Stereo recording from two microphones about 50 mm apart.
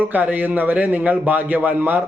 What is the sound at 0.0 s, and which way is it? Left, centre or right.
A man's voice, right.